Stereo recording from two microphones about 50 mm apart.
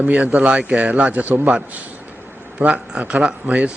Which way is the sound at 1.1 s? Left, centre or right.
Right.